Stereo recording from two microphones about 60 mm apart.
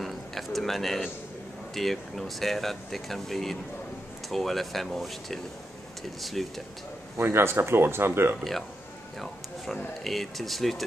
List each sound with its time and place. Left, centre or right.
0.0 s a sound: centre
1.8 s speech: centre
7.2 s speech: right
10.0 s speech: centre